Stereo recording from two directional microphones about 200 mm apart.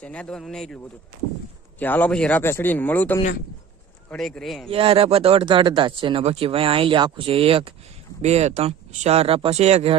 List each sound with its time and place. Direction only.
0.0 s speech: 5° left (ahead or behind)
1.8 s speech: 10° left (ahead or behind)
4.7 s speech: 30° right (ahead or behind)